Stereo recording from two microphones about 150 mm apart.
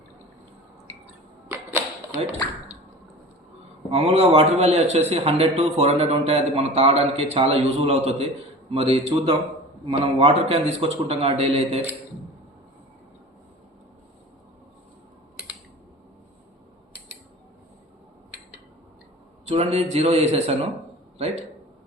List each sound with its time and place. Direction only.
1.0 s arrow: 15° right (ahead or behind)
3.8 s a man's voice: 40° right (ahead or behind)
19.5 s a man's voice: 45° right (ahead or behind)